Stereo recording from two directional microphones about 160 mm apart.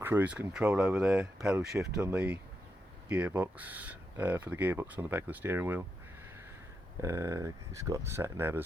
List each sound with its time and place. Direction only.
0.0 s speech: 10° right (ahead or behind)
7.0 s speech: 20° right (ahead or behind)